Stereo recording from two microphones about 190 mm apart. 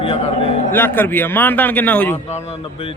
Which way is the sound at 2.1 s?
35° left (ahead or behind).